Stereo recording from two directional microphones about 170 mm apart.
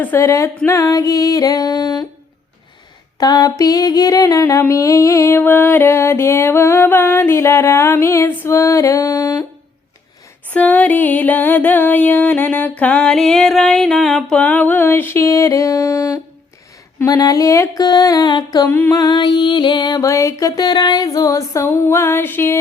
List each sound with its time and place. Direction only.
0.0 s music: 15° left (ahead or behind)
3.2 s music: 20° left (ahead or behind)
10.5 s music: 10° left (ahead or behind)